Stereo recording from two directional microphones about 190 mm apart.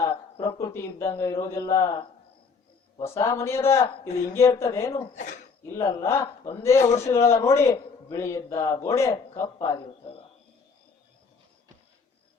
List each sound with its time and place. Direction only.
0.0 s a man's voice: 20° left (ahead or behind)
3.0 s a man's voice: 15° left (ahead or behind)
5.1 s speech: 40° left (ahead or behind)
5.6 s a man's voice: 15° left (ahead or behind)
9.6 s a man's voice: 30° left (ahead or behind)